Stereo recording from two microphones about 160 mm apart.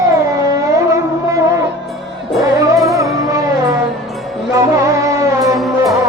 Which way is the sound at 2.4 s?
20° right (ahead or behind).